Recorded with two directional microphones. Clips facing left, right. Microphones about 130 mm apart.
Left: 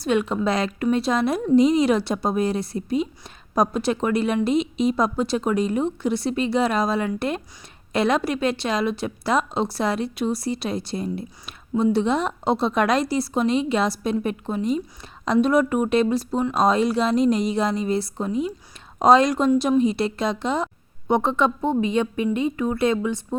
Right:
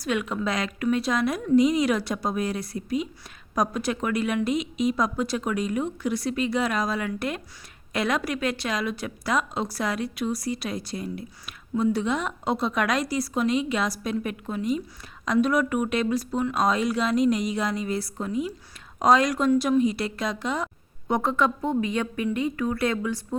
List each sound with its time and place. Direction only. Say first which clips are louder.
0.0 s a woman's voice: left 5 dB; 30° left (ahead or behind)